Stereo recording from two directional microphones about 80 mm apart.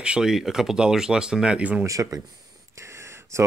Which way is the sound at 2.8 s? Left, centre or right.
Right.